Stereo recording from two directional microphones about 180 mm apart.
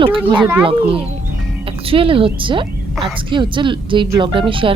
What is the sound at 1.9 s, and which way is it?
A child's voice, 30° right (ahead or behind).